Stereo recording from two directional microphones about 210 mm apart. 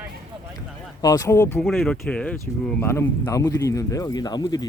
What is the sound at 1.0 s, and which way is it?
Speech, 15° left (ahead or behind).